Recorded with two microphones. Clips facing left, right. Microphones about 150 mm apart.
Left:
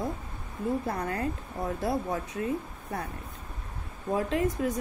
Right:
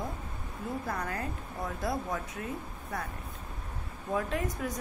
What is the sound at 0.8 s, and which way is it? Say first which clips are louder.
A woman's voice: left 4 dB; 30° left (ahead or behind).